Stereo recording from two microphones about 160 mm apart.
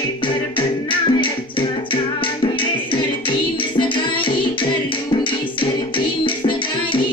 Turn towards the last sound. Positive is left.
turn(degrees=30)  # may be behind; listen again after turning